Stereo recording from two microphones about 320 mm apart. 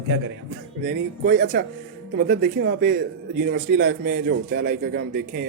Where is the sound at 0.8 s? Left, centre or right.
Right.